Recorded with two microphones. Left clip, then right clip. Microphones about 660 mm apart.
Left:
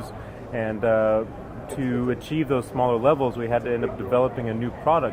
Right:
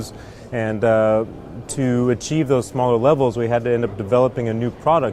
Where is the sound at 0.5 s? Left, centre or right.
Right.